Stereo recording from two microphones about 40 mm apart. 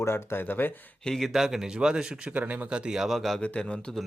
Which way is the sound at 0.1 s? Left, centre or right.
Left.